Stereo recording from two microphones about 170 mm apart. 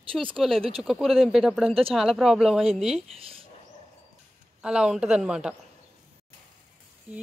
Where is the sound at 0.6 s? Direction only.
35° right (ahead or behind).